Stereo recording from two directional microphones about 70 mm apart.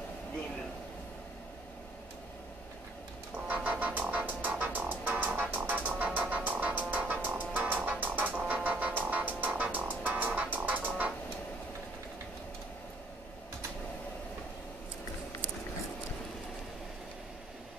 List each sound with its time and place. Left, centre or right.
3.4 s music: right
8.4 s music: centre
8.6 s music: right